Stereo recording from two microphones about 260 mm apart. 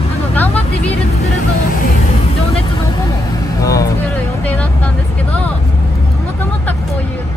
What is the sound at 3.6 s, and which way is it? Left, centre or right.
Speech, centre.